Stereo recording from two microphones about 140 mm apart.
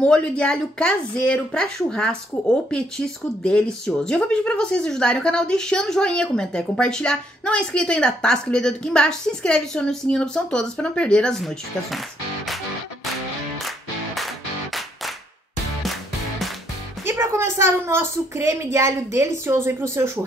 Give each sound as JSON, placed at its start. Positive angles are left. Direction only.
{"t": 0.0, "sound": "speech", "side_deg": 5}
{"t": 3.4, "sound": "a woman's voice", "side_deg": 5}
{"t": 13.7, "sound": "music", "side_deg": 0}
{"t": 17.0, "sound": "a woman's voice", "side_deg": -20}